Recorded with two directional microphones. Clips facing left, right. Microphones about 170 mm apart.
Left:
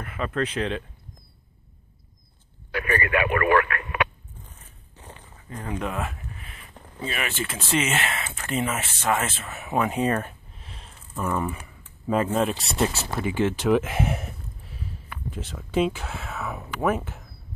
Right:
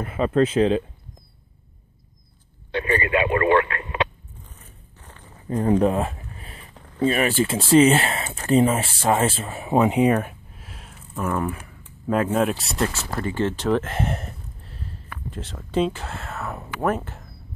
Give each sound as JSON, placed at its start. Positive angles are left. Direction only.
{"t": 0.0, "sound": "speech", "side_deg": -30}
{"t": 2.7, "sound": "a man's voice", "side_deg": -25}
{"t": 4.9, "sound": "a sound", "side_deg": 20}
{"t": 5.5, "sound": "a sound", "side_deg": -35}
{"t": 7.1, "sound": "speech", "side_deg": -40}
{"t": 13.2, "sound": "speech", "side_deg": 10}